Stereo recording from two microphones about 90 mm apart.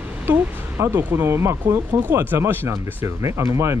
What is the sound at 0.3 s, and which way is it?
Speech, 25° right (ahead or behind).